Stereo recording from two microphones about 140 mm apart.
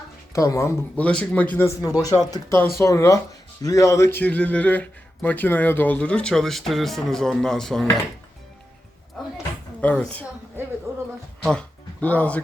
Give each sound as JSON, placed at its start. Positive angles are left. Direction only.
{"t": 0.3, "sound": "speech", "side_deg": 20}
{"t": 0.9, "sound": "a man's voice", "side_deg": 10}
{"t": 1.8, "sound": "a man's voice", "side_deg": 25}
{"t": 9.8, "sound": "a man's voice", "side_deg": 10}
{"t": 10.9, "sound": "a sound", "side_deg": -20}
{"t": 11.5, "sound": "music", "side_deg": 10}